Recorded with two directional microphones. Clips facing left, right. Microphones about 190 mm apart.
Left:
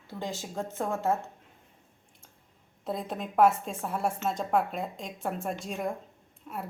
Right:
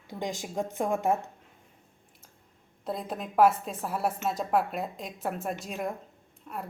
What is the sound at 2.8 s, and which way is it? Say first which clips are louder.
A woman's voice: even; centre (ahead or behind).